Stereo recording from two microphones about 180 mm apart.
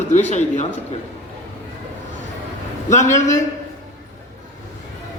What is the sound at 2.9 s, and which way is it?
Speech, 40° left (ahead or behind).